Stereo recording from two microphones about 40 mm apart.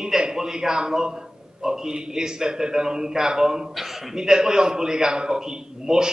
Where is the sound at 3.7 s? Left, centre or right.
Centre.